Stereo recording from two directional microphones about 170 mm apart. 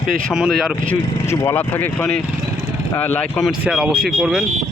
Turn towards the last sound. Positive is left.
turn(degrees=0)  # may be behind; listen again after turning